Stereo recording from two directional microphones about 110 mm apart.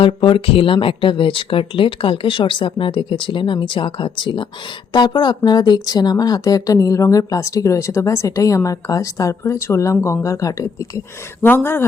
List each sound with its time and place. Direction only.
0.0 s speech: 50° left (ahead or behind); by 11.0 s 30° left (ahead or behind)
11.4 s speech: 20° left (ahead or behind)